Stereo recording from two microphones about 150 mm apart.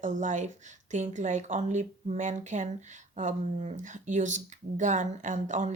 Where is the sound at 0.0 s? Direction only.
55° right (ahead or behind).